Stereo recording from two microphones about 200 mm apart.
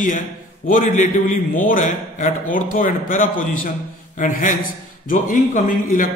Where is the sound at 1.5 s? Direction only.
40° left (ahead or behind).